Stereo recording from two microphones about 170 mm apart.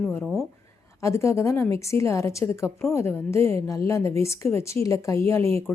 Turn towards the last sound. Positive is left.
turn(degrees=15)  # may be behind; listen again after turning